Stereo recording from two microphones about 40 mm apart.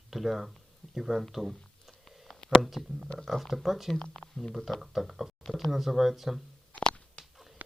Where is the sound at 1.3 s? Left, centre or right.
Centre.